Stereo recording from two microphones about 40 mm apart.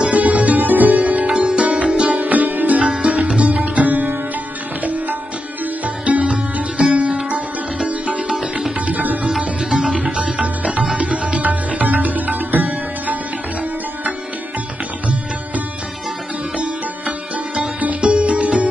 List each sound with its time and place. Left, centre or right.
0.1 s music: right
0.9 s sitar: right
2.1 s sitar: right
2.8 s music: centre
3.1 s sitar: right
6.0 s sitar: right
7.2 s music: right
8.8 s sitar: right
9.7 s sitar: centre
10.1 s sitar: right
11.0 s music: right
18.0 s music: right